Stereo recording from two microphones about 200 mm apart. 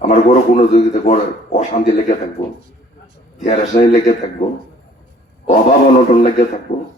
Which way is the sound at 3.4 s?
40° left (ahead or behind).